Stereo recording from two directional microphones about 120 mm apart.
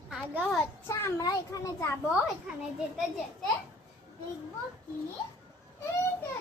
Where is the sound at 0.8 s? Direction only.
25° left (ahead or behind).